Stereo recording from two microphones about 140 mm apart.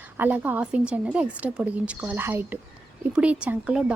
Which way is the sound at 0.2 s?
10° right (ahead or behind).